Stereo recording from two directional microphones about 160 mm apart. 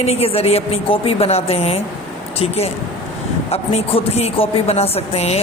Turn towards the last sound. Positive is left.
turn(degrees=40)  # may be behind; listen again after turning